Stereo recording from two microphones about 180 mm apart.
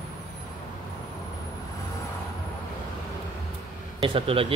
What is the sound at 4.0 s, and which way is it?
Speech, 30° right (ahead or behind).